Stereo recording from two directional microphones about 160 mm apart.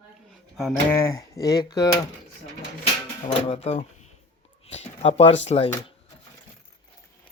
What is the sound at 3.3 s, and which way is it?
Speech, 35° left (ahead or behind).